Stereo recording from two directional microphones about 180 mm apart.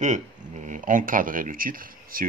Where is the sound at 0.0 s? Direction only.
40° right (ahead or behind).